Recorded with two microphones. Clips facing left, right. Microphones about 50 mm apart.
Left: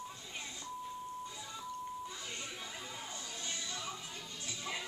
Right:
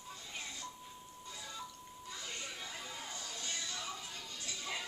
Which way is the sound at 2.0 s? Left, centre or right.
Centre.